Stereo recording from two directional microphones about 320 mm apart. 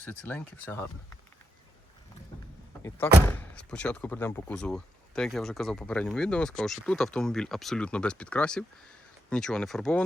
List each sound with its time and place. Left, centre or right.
0.0 s speech: centre
2.3 s vehicle: centre
3.2 s speech: centre